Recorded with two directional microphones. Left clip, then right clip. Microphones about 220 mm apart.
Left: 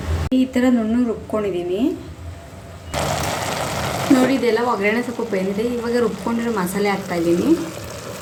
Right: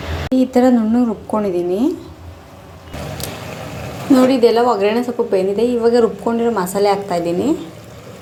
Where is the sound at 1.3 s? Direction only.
15° right (ahead or behind).